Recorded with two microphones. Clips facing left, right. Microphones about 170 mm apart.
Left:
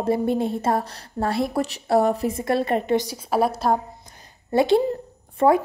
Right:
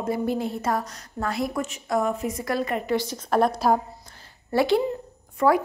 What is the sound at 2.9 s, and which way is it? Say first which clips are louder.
Speech: left 1 dB; 10° left (ahead or behind).